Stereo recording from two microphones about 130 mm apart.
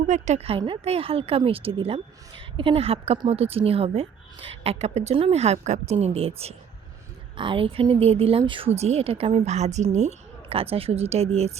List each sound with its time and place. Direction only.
0.1 s a woman's voice: 60° right (ahead or behind)